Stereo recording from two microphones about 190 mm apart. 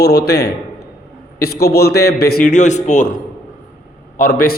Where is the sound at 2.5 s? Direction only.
40° left (ahead or behind).